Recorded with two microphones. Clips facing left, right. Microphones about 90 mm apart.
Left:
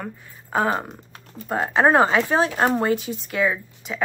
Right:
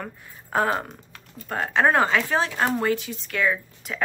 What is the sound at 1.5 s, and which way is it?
Speech, 15° left (ahead or behind).